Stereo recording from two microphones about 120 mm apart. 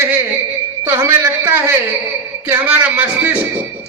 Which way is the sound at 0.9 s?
20° right (ahead or behind).